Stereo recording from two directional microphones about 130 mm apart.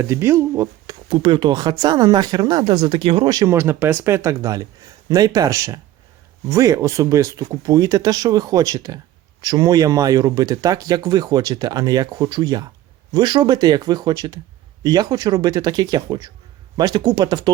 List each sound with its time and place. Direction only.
0.0 s speech: 20° right (ahead or behind)